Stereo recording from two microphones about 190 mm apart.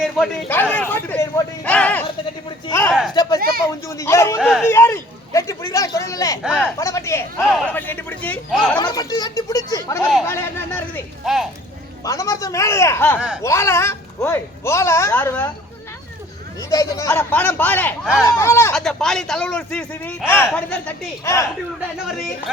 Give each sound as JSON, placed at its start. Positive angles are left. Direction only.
{"t": 0.0, "sound": "a man's voice", "side_deg": 5}
{"t": 4.4, "sound": "a man's voice", "side_deg": -5}
{"t": 4.6, "sound": "a man's voice", "side_deg": 15}
{"t": 8.8, "sound": "speech", "side_deg": 20}
{"t": 10.0, "sound": "a man's voice", "side_deg": 0}
{"t": 10.2, "sound": "a man's voice", "side_deg": 15}
{"t": 12.0, "sound": "a man's voice", "side_deg": 20}
{"t": 13.1, "sound": "a man's voice", "side_deg": -5}
{"t": 13.4, "sound": "a man's voice", "side_deg": 15}
{"t": 16.6, "sound": "a man's voice", "side_deg": 20}
{"t": 18.7, "sound": "a man's voice", "side_deg": 5}